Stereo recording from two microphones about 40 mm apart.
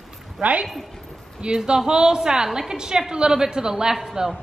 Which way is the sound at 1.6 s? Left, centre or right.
Centre.